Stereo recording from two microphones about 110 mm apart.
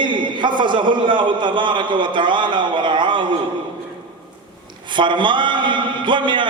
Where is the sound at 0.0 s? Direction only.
45° right (ahead or behind).